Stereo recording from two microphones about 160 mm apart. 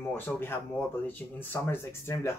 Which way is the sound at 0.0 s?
15° left (ahead or behind).